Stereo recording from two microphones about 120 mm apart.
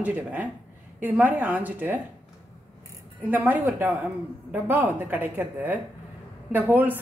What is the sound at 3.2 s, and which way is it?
Speech, 15° right (ahead or behind).